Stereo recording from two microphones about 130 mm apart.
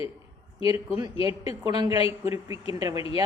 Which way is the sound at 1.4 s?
30° right (ahead or behind).